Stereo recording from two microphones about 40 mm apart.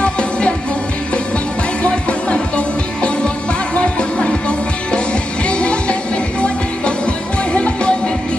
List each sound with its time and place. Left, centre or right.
0.0 s music: left
1.8 s music: left